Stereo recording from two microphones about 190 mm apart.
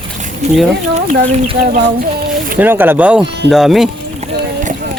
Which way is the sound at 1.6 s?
45° right (ahead or behind).